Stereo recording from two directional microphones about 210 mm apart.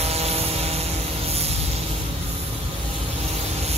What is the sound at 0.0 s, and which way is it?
Vehicle, 30° right (ahead or behind).